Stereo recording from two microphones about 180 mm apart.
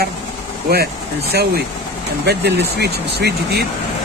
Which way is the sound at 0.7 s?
60° right (ahead or behind).